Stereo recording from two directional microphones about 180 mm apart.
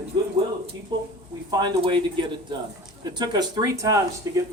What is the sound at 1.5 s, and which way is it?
Speech, 25° right (ahead or behind).